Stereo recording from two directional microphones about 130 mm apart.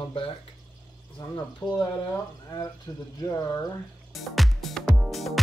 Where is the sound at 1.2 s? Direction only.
30° left (ahead or behind).